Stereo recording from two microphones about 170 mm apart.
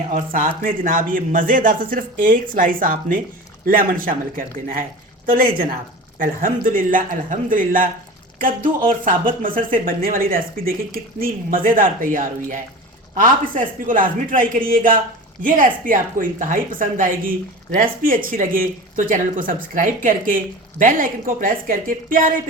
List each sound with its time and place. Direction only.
0.1 s speech: 50° right (ahead or behind)